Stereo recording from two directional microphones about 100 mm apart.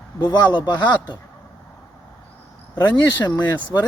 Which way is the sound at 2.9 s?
20° left (ahead or behind).